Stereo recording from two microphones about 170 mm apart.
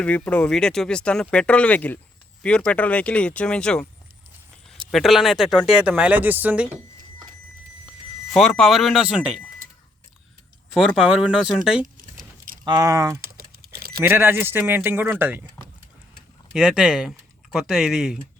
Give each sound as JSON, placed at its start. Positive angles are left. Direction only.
{"t": 0.0, "sound": "speech", "side_deg": 5}
{"t": 4.9, "sound": "speech", "side_deg": 0}
{"t": 8.3, "sound": "speech", "side_deg": 0}
{"t": 10.8, "sound": "speech", "side_deg": -5}
{"t": 11.9, "sound": "keys jangling", "side_deg": -55}
{"t": 12.6, "sound": "speech", "side_deg": -20}
{"t": 13.2, "sound": "typing", "side_deg": -65}
{"t": 13.7, "sound": "keys jangling", "side_deg": -60}
{"t": 14.1, "sound": "a man's voice", "side_deg": -10}
{"t": 16.5, "sound": "speech", "side_deg": -5}